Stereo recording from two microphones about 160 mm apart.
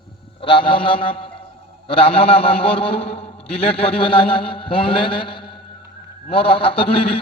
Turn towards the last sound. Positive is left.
turn(degrees=35)  # may be behind; listen again after turning